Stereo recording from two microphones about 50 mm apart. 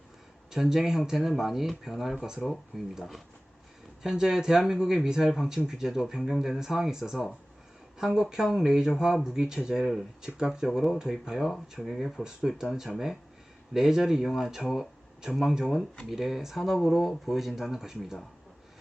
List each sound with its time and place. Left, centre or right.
0.5 s speech: centre
4.0 s speech: centre
10.2 s speech: centre
11.3 s speech: centre
12.2 s speech: centre